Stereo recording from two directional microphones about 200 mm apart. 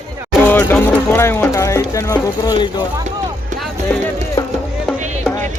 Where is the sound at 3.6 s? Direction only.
10° left (ahead or behind).